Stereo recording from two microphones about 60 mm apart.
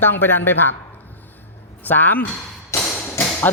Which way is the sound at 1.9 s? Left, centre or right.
Left.